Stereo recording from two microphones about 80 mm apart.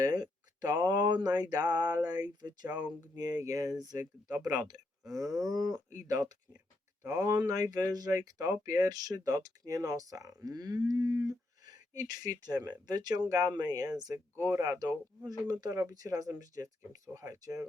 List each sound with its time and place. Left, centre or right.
0.0 s speech: right
5.0 s speech: right
7.0 s speech: right
7.4 s speech: right
14.3 s speech: right